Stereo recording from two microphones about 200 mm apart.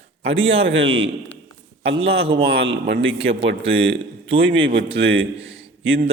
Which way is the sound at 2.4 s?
65° right (ahead or behind).